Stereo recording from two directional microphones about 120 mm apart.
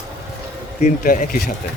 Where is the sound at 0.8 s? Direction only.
90° left.